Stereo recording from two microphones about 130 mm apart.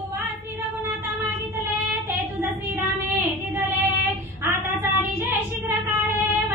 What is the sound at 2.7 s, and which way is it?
Child singing, 15° right (ahead or behind).